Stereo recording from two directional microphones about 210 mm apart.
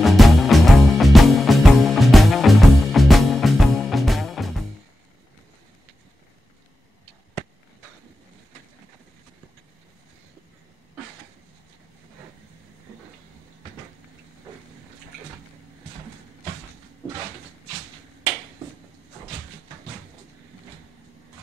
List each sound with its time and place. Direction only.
0.0 s music: centre (ahead or behind)